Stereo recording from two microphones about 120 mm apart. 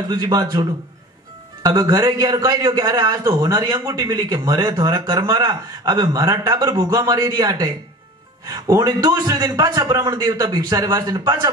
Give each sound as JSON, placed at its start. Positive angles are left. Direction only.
{"t": 0.1, "sound": "a man's voice", "side_deg": -35}